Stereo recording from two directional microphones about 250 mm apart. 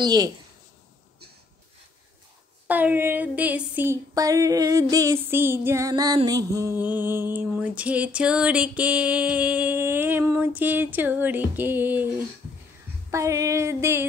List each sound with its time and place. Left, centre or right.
0.0 s female singing: centre
2.7 s female singing: centre
13.1 s female singing: centre